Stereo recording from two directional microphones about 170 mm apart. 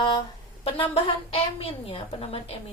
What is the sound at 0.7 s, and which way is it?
A woman's voice, 35° left (ahead or behind).